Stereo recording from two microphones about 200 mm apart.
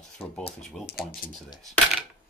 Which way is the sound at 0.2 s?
30° left (ahead or behind).